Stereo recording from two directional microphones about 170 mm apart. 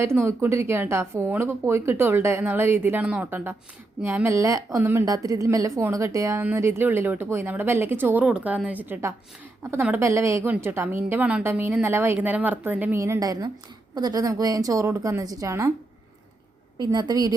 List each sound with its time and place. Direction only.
0.0 s a woman's voice: 15° right (ahead or behind)
16.7 s a woman's voice: 25° right (ahead or behind)